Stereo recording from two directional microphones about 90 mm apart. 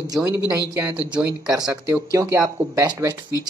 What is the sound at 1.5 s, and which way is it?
Speech, 40° right (ahead or behind).